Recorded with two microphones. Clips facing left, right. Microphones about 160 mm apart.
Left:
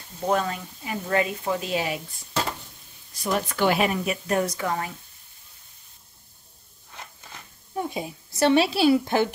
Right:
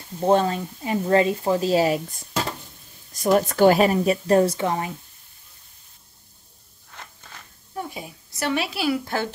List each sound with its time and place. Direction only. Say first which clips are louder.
0.2 s a woman's voice: right 6 dB; 30° right (ahead or behind)
3.1 s a woman's voice: right 7 dB; 45° right (ahead or behind); by 4.9 s 20° right (ahead or behind)
7.7 s a woman's voice: left 3 dB; 20° left (ahead or behind)